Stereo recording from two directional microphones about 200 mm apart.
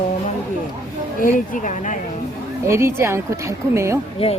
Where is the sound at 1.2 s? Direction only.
40° left (ahead or behind).